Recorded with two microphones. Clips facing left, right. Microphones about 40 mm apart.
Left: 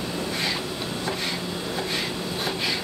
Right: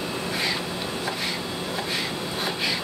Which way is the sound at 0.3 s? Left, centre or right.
Centre.